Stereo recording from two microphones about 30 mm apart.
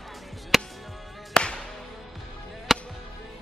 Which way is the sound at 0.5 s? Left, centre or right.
Centre.